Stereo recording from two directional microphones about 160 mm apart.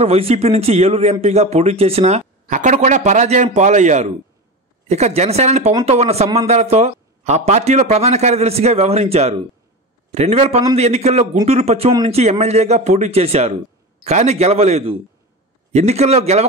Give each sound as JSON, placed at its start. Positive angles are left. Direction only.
{"t": 0.0, "sound": "a man's voice", "side_deg": -40}